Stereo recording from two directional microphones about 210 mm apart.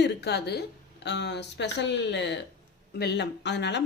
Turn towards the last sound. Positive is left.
turn(degrees=55)  # may be behind; listen again after turning